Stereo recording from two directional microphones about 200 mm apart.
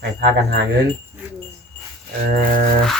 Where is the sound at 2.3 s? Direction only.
45° right (ahead or behind).